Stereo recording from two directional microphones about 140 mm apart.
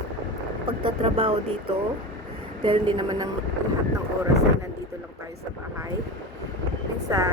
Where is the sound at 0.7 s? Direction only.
45° right (ahead or behind).